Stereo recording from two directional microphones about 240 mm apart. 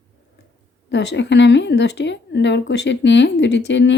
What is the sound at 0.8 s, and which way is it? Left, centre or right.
A woman's voice, left.